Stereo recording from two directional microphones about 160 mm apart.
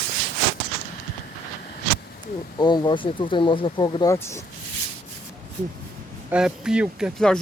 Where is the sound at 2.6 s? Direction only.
25° left (ahead or behind).